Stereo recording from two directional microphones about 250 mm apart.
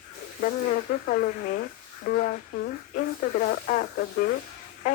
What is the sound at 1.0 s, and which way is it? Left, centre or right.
Speech, left.